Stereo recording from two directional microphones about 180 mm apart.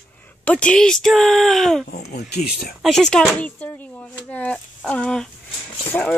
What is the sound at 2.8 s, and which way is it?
Speech, centre (ahead or behind).